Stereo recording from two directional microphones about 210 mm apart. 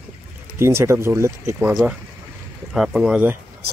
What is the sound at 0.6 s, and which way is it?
Speech, 10° right (ahead or behind).